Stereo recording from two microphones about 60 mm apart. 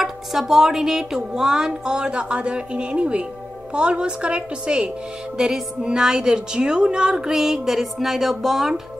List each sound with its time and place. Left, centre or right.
0.0 s speech: centre